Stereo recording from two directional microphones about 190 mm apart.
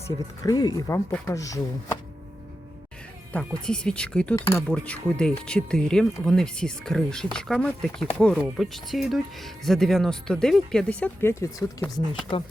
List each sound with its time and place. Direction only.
0.4 s speech: 20° left (ahead or behind)
3.3 s speech: 5° left (ahead or behind)